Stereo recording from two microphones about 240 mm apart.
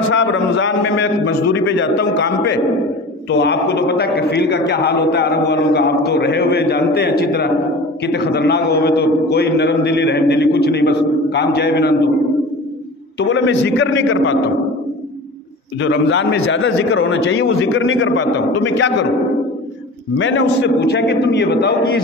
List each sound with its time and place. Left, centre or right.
0.1 s a man's voice: left
13.2 s a man's voice: left
15.8 s a man's voice: left
20.2 s a man's voice: left